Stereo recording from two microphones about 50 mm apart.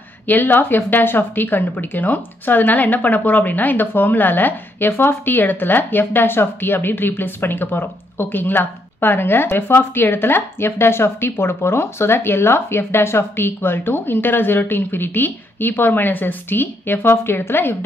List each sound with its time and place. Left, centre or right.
0.3 s speech: left
4.8 s speech: left